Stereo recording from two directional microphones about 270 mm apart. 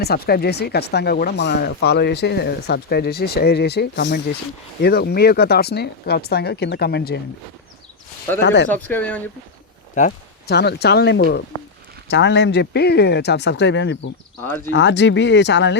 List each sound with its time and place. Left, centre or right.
0.0 s speech: left
8.4 s speech: left
8.7 s speech: centre
9.9 s speech: left
14.4 s speech: centre
14.7 s speech: left